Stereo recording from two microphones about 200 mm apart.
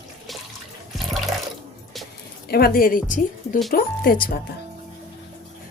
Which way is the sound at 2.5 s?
45° left (ahead or behind).